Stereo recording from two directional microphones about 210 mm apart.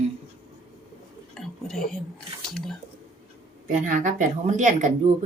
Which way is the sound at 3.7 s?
40° right (ahead or behind).